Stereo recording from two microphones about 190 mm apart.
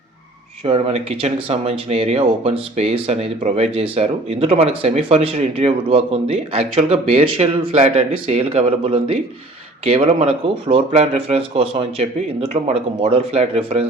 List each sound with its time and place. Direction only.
0.6 s speech: 30° right (ahead or behind)